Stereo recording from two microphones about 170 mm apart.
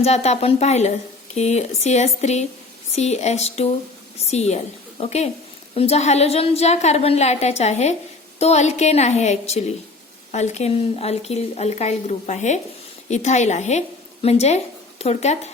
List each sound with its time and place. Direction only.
0.0 s a woman's voice: 40° left (ahead or behind)